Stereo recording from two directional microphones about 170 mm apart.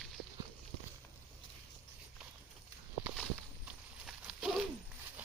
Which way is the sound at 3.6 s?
5° right (ahead or behind).